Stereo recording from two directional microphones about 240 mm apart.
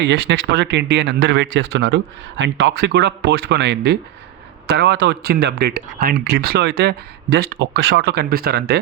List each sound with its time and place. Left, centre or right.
0.0 s speech: right